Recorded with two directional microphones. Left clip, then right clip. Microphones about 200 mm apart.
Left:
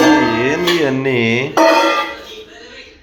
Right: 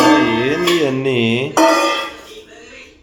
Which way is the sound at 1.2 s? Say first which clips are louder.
Left 2 dB; 15° right (ahead or behind).